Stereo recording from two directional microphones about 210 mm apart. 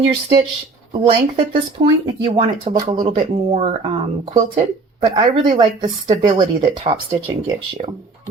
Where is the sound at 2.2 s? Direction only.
25° right (ahead or behind).